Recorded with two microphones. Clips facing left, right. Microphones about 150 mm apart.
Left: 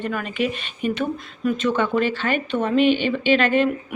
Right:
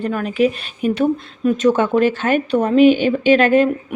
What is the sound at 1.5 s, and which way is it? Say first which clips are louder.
A woman's voice: right 6 dB; 40° right (ahead or behind).